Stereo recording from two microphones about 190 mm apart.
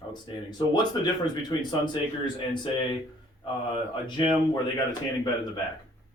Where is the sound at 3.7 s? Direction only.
25° left (ahead or behind).